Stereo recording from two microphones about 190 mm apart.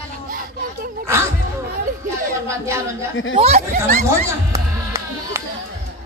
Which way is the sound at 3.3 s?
35° right (ahead or behind).